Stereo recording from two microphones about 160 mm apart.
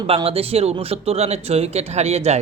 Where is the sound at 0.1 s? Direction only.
35° right (ahead or behind).